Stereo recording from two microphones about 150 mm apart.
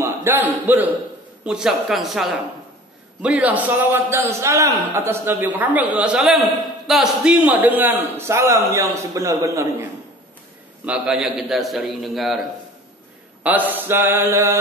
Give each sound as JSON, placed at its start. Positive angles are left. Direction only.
{"t": 0.0, "sound": "a sound", "side_deg": -15}
{"t": 1.4, "sound": "a man's voice", "side_deg": -5}
{"t": 10.9, "sound": "a man's voice", "side_deg": -5}
{"t": 13.4, "sound": "a man's voice", "side_deg": -10}